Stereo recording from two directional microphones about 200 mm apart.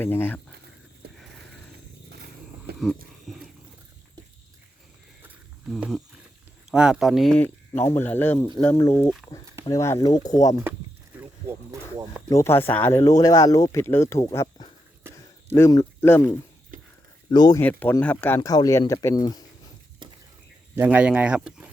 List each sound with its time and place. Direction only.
0.0 s speech: 10° left (ahead or behind)
2.7 s speech: centre (ahead or behind)
5.2 s a sound: 5° right (ahead or behind)
6.7 s speech: 5° right (ahead or behind); by 9.0 s 10° left (ahead or behind)
9.0 s speech: centre (ahead or behind)
9.6 s speech: 15° left (ahead or behind)
11.2 s speech: 15° right (ahead or behind)
12.3 s speech: 15° left (ahead or behind)
17.3 s speech: 20° left (ahead or behind)
17.6 s speech: 10° left (ahead or behind)
20.7 s speech: 10° right (ahead or behind)